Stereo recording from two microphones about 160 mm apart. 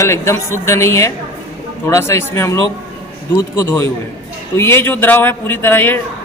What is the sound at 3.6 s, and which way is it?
Speech, 15° left (ahead or behind).